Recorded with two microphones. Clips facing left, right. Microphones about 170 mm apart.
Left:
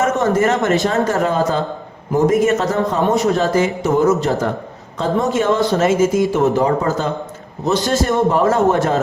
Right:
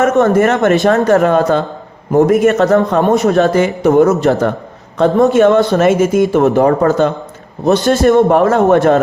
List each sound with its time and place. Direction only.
0.0 s a man's voice: 65° right (ahead or behind)